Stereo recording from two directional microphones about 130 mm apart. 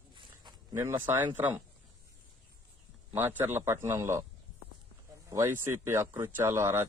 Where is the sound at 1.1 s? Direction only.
15° right (ahead or behind).